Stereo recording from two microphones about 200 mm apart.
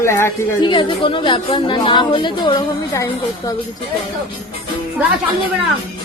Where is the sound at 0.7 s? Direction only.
25° left (ahead or behind).